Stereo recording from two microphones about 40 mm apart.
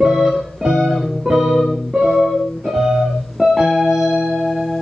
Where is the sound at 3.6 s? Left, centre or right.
Centre.